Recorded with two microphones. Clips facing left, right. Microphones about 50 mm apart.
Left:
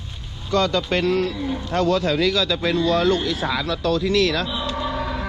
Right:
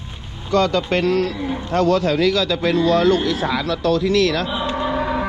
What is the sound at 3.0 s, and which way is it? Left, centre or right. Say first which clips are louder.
Speech: right 3 dB; right.